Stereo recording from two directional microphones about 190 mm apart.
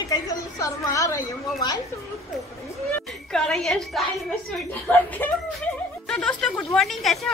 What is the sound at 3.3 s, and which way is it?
Speech, 5° left (ahead or behind).